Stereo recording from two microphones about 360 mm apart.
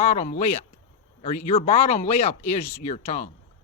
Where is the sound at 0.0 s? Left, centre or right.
Centre.